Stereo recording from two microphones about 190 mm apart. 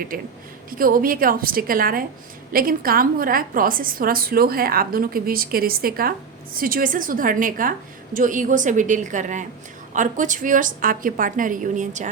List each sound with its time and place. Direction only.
0.1 s a woman's voice: 50° right (ahead or behind)